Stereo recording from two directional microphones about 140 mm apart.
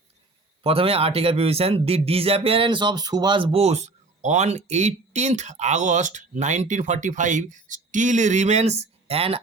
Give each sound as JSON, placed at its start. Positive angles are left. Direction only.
{"t": 0.6, "sound": "speech", "side_deg": -45}